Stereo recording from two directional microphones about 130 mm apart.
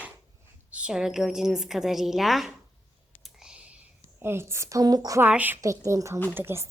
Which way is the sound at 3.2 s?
5° right (ahead or behind).